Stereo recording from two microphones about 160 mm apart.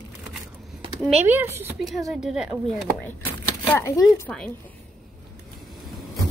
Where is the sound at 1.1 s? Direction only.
15° right (ahead or behind).